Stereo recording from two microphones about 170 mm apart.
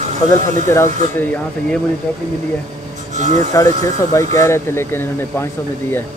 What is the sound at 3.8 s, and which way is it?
Speech, 20° left (ahead or behind).